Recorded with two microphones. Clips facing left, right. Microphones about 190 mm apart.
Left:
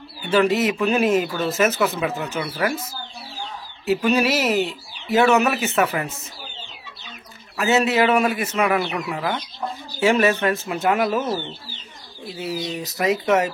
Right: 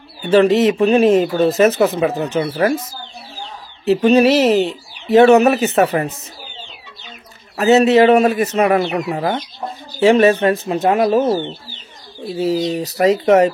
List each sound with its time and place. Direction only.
0.2 s speech: 35° right (ahead or behind)
4.0 s speech: 30° right (ahead or behind)
7.5 s speech: 35° right (ahead or behind)
12.4 s speech: 30° right (ahead or behind)